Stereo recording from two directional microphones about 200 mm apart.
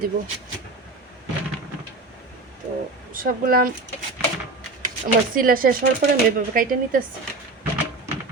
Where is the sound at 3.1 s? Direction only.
45° right (ahead or behind).